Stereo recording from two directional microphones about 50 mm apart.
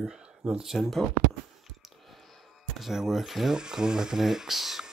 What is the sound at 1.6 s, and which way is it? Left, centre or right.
Music, centre.